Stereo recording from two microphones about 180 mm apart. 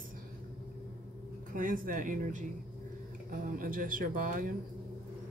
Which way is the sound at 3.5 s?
50° right (ahead or behind).